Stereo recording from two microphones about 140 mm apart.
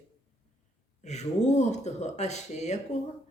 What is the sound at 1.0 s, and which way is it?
Speech, 55° left (ahead or behind).